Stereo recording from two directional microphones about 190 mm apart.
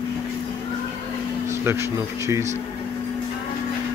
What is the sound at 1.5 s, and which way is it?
Speech, 15° right (ahead or behind).